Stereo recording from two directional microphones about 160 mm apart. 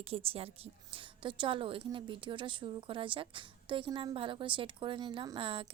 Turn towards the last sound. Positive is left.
turn(degrees=-35)  # may be behind; listen again after turning